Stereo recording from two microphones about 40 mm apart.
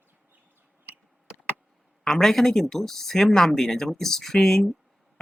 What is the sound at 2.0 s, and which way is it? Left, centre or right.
Speech, centre.